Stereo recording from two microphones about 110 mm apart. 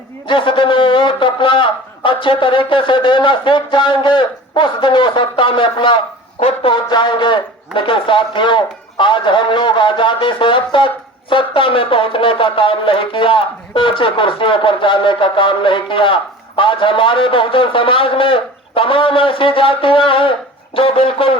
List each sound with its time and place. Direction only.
0.3 s speech: 50° left (ahead or behind)
6.8 s speech: 45° left (ahead or behind)